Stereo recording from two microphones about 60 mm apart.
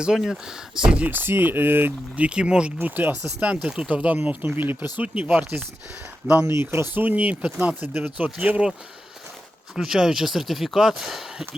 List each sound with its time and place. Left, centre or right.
0.0 s speech: centre
1.0 s speech: right
2.1 s speech: centre
2.8 s speech: right
3.4 s speech: centre
4.5 s speech: right
6.4 s speech: right
6.9 s speech: right
9.7 s speech: centre